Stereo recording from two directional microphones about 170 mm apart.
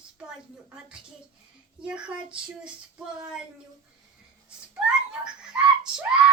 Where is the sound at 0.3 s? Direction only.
5° right (ahead or behind).